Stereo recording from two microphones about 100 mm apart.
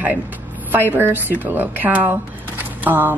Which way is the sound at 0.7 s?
20° right (ahead or behind).